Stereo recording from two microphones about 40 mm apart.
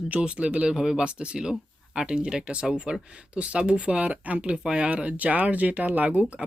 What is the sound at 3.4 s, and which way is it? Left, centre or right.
Speech, right.